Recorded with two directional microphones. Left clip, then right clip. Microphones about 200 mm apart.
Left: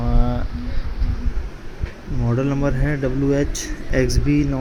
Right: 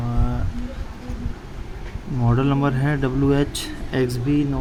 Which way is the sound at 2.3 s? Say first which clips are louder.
Even; 15° right (ahead or behind).